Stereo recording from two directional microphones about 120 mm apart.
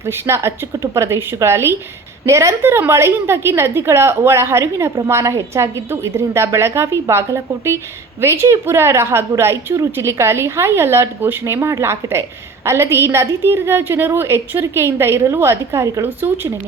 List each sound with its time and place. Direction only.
0.0 s a woman's voice: 20° right (ahead or behind)